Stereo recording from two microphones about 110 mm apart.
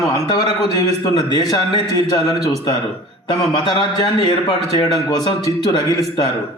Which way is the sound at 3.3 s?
40° left (ahead or behind).